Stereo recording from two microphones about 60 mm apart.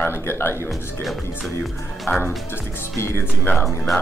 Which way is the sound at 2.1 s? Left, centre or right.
Left.